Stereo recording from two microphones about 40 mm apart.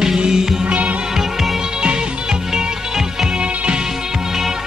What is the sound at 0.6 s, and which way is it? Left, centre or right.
Music, right.